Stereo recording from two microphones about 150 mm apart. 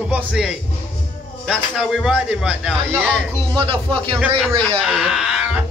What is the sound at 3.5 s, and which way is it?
Speech, 35° right (ahead or behind).